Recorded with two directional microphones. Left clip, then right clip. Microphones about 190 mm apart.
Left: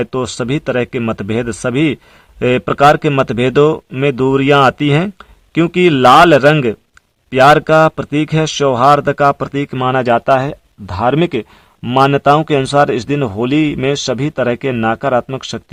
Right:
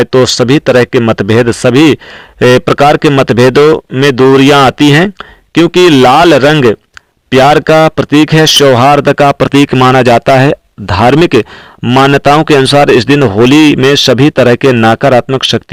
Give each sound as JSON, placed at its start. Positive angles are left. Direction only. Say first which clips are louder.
{"t": 0.1, "sound": "speech", "louder": "right 12 dB", "side_deg": -20}
{"t": 14.8, "sound": "speech", "louder": "right 6 dB", "side_deg": -35}
{"t": 15.3, "sound": "speech", "louder": "right 14 dB", "side_deg": -25}